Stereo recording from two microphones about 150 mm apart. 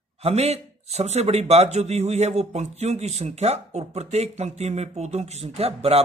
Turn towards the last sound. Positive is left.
turn(degrees=-40)  # may be behind; listen again after turning